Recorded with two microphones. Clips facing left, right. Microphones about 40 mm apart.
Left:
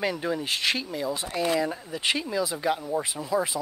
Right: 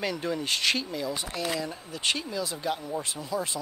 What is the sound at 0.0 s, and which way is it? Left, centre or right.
Speech, centre.